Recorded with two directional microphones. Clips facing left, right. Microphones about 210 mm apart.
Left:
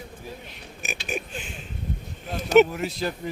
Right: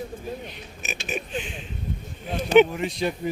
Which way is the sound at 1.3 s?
45° left (ahead or behind).